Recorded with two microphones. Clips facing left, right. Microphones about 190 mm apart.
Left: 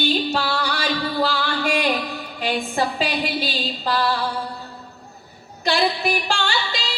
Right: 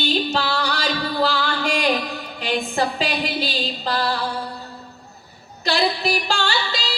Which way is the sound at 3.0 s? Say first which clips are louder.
Even; 45° right (ahead or behind).